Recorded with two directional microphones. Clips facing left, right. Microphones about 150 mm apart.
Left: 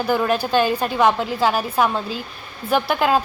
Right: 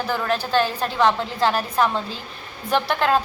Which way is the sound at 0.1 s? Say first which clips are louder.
Left 4 dB; 10° left (ahead or behind).